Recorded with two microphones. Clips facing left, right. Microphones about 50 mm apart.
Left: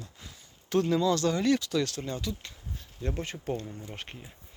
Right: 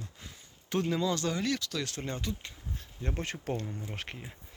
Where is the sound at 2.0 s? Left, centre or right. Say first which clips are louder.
Left 2 dB; right.